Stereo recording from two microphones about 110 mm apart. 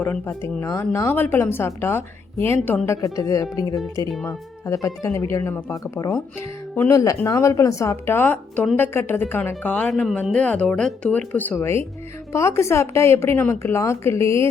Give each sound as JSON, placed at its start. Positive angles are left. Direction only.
{"t": 0.0, "sound": "a woman's voice", "side_deg": 20}
{"t": 4.1, "sound": "speech", "side_deg": 10}
{"t": 4.6, "sound": "a woman's voice", "side_deg": 30}
{"t": 9.9, "sound": "speech", "side_deg": 0}
{"t": 10.3, "sound": "a woman's voice", "side_deg": 10}